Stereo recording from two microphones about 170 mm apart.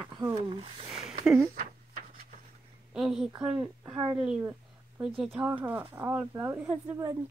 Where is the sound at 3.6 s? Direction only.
20° right (ahead or behind).